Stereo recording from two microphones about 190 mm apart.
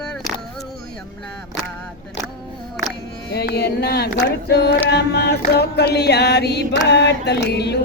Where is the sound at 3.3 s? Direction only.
60° left (ahead or behind).